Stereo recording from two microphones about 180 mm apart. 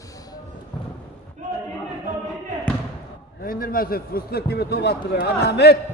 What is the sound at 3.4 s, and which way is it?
A man's voice, 55° left (ahead or behind).